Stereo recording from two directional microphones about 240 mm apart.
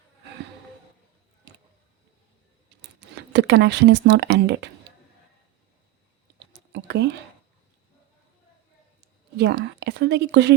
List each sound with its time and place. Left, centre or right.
3.2 s speech: right
6.5 s whispering: right
9.0 s a woman's voice: right